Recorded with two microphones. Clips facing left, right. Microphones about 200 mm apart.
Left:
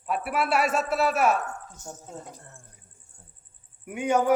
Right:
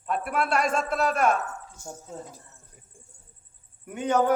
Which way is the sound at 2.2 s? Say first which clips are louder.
Right 1 dB; 60° left (ahead or behind).